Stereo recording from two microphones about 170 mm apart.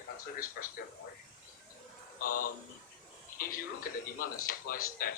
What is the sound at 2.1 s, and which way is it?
Speech, 55° left (ahead or behind).